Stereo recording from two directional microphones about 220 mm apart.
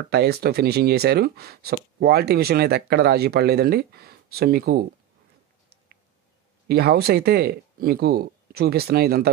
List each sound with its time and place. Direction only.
0.1 s speech: 45° right (ahead or behind)
6.7 s speech: 45° right (ahead or behind)